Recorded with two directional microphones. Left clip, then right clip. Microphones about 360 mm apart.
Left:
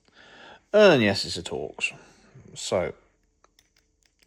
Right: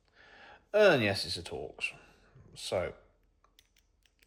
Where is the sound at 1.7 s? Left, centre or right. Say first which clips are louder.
Left 8 dB; left.